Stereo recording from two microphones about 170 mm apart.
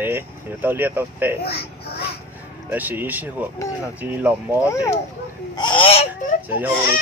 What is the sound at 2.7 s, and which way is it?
Speech, 10° right (ahead or behind).